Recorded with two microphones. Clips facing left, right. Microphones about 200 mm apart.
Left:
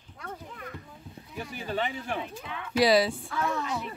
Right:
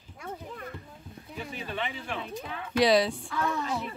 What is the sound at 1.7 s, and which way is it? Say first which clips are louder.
Speech: left 5 dB; 40° left (ahead or behind).